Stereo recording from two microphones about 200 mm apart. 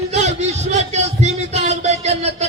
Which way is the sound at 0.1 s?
35° right (ahead or behind).